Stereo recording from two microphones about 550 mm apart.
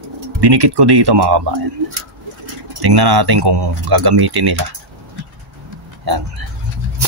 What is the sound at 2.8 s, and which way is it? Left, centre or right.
Speech, right.